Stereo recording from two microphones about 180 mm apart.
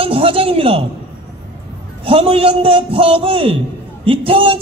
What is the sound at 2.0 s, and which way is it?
A man's voice, 30° right (ahead or behind).